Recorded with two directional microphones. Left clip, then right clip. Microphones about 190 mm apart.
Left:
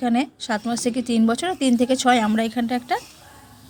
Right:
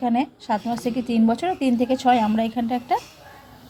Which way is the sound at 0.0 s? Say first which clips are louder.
Even; 25° left (ahead or behind).